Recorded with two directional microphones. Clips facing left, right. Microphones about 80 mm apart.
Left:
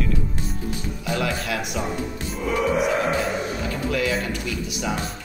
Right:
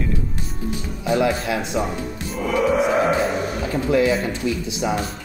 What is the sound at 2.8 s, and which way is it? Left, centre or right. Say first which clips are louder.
Music: right 3 dB; right.